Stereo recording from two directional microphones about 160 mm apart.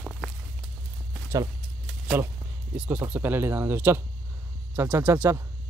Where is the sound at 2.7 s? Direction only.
10° right (ahead or behind).